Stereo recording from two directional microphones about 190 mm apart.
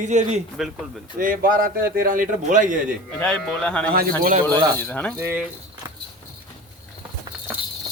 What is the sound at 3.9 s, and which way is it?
Speech, 50° right (ahead or behind).